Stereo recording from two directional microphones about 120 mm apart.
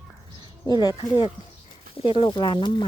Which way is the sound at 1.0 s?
35° left (ahead or behind).